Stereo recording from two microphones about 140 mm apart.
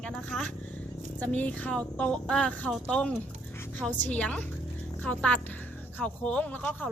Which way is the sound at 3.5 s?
15° left (ahead or behind).